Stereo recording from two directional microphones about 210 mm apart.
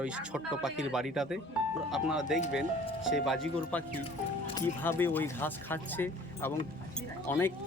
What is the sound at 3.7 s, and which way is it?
Speech, 5° left (ahead or behind).